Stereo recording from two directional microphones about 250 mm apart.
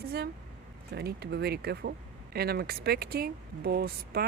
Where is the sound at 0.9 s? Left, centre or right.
Right.